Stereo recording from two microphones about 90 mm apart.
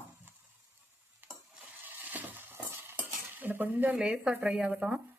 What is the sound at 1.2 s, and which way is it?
Stir, 20° right (ahead or behind).